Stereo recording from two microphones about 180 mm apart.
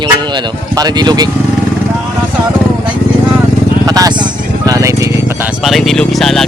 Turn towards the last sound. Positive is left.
turn(degrees=0)  # may be behind; listen again after turning